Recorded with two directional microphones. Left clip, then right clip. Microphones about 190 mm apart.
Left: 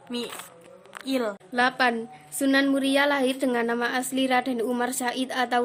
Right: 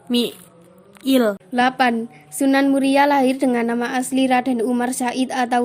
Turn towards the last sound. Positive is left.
turn(degrees=-15)  # may be behind; listen again after turning